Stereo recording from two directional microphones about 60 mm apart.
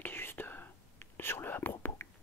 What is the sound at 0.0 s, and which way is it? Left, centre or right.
Whispering, left.